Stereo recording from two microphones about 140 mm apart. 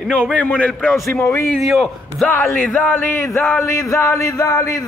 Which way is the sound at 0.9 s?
20° left (ahead or behind).